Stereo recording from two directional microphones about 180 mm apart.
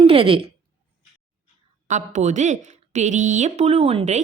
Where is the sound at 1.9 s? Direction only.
40° right (ahead or behind).